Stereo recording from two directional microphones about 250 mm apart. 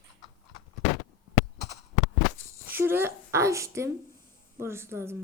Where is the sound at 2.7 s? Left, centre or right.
Centre.